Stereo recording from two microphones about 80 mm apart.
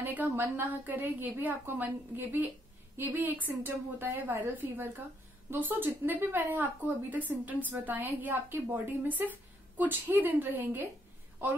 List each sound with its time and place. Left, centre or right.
0.0 s a woman's voice: right